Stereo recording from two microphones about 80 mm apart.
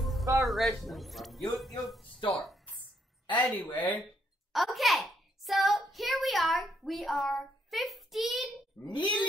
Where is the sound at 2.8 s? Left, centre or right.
Centre.